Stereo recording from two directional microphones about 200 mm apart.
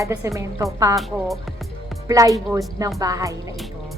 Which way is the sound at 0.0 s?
15° right (ahead or behind).